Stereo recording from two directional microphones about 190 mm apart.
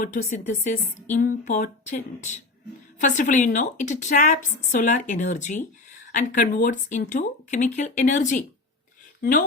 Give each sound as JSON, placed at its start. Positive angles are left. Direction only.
{"t": 0.0, "sound": "a woman's voice", "side_deg": 40}